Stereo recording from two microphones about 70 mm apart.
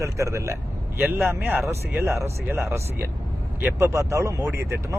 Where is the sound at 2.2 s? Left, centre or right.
Right.